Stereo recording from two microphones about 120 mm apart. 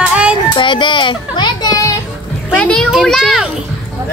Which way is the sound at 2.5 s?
10° left (ahead or behind).